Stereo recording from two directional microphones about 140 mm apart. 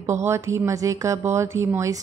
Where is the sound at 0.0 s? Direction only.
20° right (ahead or behind).